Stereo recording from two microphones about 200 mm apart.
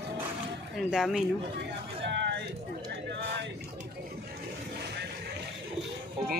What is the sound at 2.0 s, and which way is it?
Speech, 60° right (ahead or behind).